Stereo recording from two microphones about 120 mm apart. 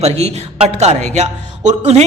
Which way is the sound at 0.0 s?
60° right (ahead or behind).